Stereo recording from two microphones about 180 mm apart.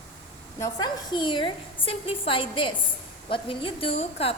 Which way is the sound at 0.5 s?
20° left (ahead or behind).